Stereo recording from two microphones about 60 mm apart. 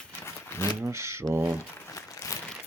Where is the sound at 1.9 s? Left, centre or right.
Left.